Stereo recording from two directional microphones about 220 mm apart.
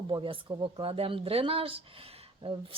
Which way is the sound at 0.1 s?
20° right (ahead or behind).